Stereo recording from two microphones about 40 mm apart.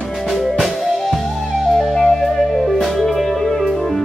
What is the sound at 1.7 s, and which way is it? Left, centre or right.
Music, centre.